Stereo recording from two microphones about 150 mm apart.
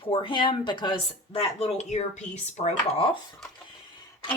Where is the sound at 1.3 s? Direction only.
45° left (ahead or behind).